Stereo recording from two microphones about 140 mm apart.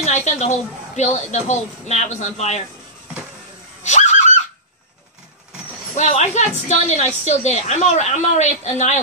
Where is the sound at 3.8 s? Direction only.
60° left (ahead or behind).